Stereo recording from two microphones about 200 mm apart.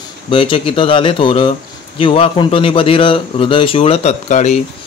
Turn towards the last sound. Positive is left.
turn(degrees=35)  # may be behind; listen again after turning